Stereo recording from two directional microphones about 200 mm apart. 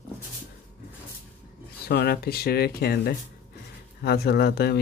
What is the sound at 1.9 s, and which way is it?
Speech, 55° left (ahead or behind).